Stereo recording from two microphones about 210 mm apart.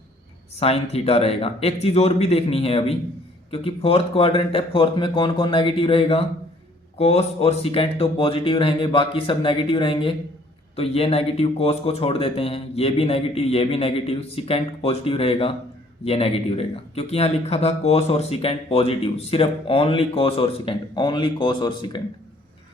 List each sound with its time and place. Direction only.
0.6 s speech: 30° left (ahead or behind)